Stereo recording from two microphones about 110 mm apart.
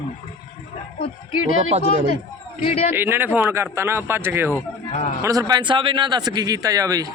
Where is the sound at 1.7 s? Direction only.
75° right (ahead or behind).